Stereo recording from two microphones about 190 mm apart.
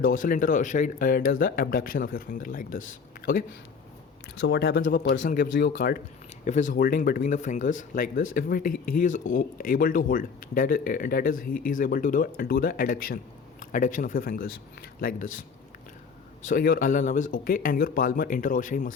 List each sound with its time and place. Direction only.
0.0 s speech: 45° left (ahead or behind)
4.4 s speech: 60° left (ahead or behind)
5.2 s speech: 45° left (ahead or behind)
5.5 s speech: 70° left (ahead or behind)
6.4 s speech: 40° left (ahead or behind)